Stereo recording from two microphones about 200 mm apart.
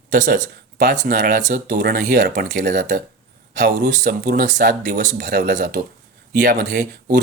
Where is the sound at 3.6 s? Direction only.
60° right (ahead or behind).